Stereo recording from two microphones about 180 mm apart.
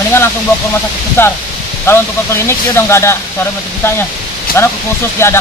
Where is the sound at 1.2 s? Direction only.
15° left (ahead or behind).